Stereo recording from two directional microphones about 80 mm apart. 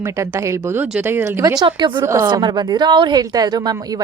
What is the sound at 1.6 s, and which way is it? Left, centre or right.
Speech, right.